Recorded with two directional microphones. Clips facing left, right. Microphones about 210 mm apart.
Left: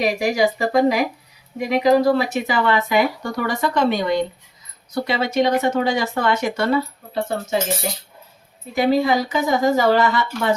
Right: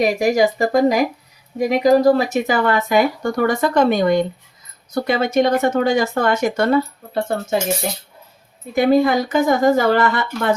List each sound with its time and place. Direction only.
0.0 s speech: 45° right (ahead or behind)
8.7 s speech: 55° right (ahead or behind)